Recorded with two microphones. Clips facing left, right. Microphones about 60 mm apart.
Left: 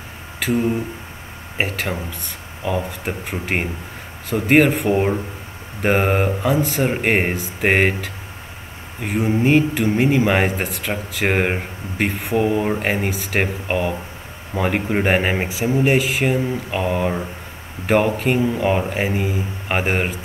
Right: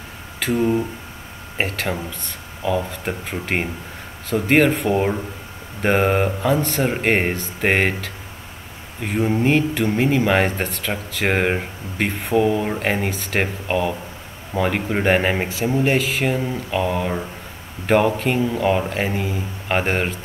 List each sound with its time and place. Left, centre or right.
0.4 s speech: centre
12.4 s speech: centre
12.6 s speech: centre
13.7 s speech: centre
17.8 s speech: centre